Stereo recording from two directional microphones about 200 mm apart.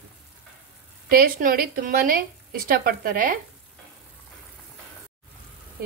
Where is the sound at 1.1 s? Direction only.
45° right (ahead or behind).